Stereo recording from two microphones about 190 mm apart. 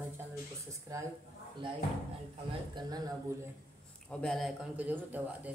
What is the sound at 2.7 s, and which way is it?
Speech, 20° right (ahead or behind).